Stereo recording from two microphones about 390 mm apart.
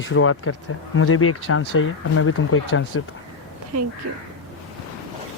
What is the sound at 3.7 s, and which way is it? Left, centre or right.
Speech, right.